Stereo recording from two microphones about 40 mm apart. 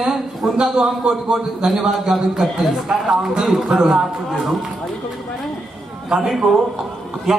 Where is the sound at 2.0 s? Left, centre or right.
Centre.